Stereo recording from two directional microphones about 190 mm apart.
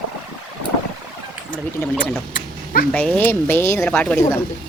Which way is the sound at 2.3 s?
45° left (ahead or behind).